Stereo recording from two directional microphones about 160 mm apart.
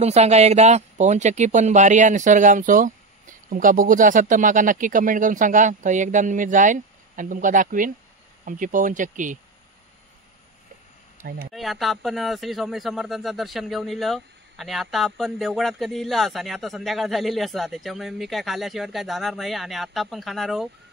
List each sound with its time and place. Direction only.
0.0 s speech: 45° right (ahead or behind)
11.5 s speech: centre (ahead or behind)